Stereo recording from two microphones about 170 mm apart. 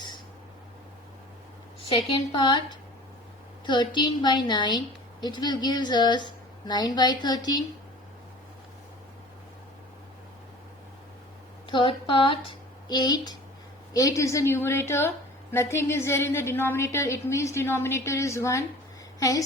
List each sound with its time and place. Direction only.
1.9 s a woman's voice: 35° left (ahead or behind)
3.7 s a woman's voice: 25° left (ahead or behind)
11.7 s a woman's voice: 30° left (ahead or behind)